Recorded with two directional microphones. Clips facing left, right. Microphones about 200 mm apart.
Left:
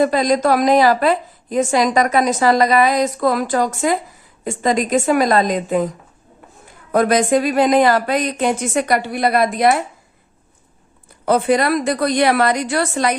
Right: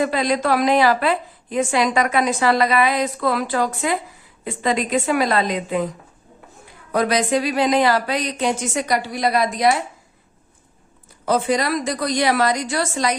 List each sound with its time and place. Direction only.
0.0 s a woman's voice: 40° left (ahead or behind)
6.9 s speech: 50° left (ahead or behind)
11.3 s a woman's voice: 60° left (ahead or behind)